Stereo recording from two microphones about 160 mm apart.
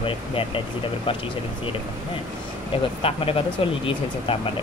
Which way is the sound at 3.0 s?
35° left (ahead or behind).